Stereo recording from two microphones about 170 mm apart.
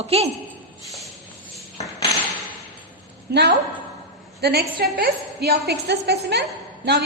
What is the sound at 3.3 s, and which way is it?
A woman's voice, 70° right (ahead or behind).